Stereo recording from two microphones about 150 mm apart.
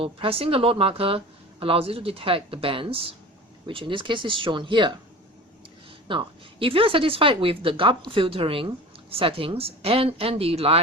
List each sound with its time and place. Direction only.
0.0 s speech: 40° right (ahead or behind)
6.1 s speech: 35° right (ahead or behind)